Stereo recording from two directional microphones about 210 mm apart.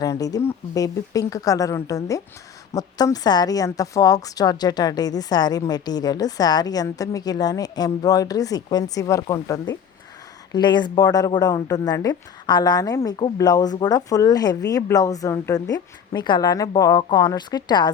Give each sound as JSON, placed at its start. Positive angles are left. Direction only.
{"t": 0.0, "sound": "a woman's voice", "side_deg": 15}